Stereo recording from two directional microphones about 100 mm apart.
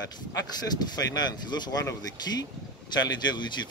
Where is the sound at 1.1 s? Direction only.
45° left (ahead or behind).